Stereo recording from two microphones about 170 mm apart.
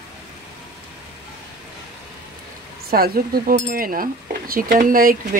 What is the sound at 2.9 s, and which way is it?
Speech, 60° right (ahead or behind).